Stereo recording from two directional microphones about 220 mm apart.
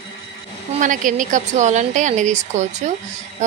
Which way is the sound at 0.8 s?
40° right (ahead or behind).